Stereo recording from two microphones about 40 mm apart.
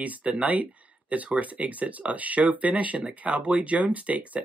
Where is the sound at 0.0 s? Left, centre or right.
Right.